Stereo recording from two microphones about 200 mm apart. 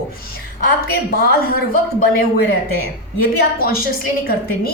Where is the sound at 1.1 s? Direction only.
50° left (ahead or behind).